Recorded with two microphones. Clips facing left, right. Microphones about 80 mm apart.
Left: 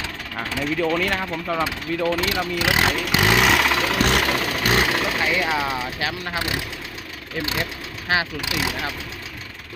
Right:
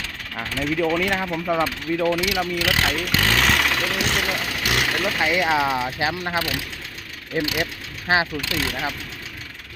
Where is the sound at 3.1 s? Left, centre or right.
Centre.